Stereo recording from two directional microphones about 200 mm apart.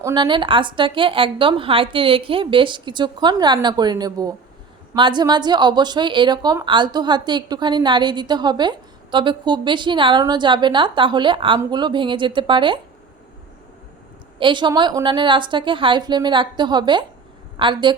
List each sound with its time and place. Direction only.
0.0 s a woman's voice: 20° right (ahead or behind)
14.3 s a woman's voice: 25° right (ahead or behind)